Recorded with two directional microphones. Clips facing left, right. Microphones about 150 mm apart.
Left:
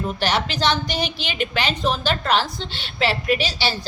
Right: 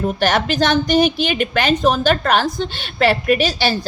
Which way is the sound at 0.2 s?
50° right (ahead or behind).